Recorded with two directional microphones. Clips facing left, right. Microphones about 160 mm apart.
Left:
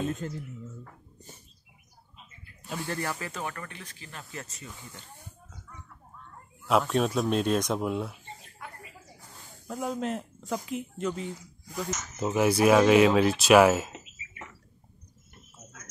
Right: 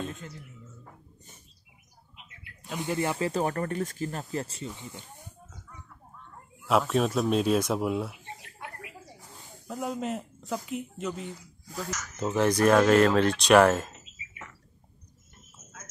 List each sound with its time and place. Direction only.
0.2 s speech: 40° left (ahead or behind)
2.7 s speech: 15° right (ahead or behind)
6.6 s speech: centre (ahead or behind)
9.7 s speech: centre (ahead or behind)